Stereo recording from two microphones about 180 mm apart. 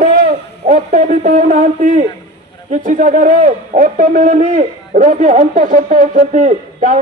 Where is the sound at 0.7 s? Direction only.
45° right (ahead or behind).